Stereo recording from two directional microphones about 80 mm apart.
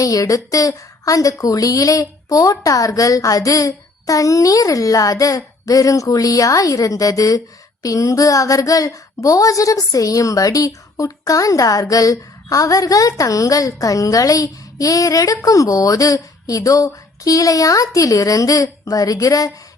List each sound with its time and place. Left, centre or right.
0.0 s a woman's voice: left